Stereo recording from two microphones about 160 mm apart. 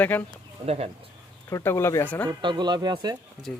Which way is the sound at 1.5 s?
15° left (ahead or behind).